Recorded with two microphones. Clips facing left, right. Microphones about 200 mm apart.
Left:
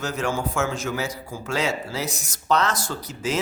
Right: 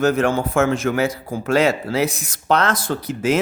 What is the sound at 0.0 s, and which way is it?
Speech, 55° right (ahead or behind).